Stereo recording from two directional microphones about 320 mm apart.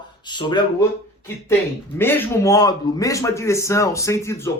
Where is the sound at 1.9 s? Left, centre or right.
Centre.